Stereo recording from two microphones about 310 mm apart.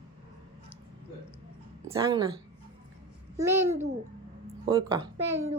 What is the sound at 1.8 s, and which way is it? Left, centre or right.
Speech, centre.